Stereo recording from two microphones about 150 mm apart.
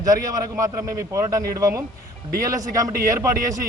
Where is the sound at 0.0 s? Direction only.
25° right (ahead or behind).